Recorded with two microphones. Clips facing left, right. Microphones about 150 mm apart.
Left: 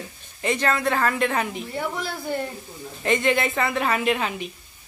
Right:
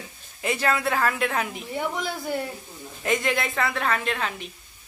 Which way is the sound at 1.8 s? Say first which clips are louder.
Right 1 dB; 15° right (ahead or behind).